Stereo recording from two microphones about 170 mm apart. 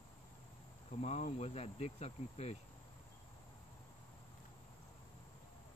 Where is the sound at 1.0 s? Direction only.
40° left (ahead or behind).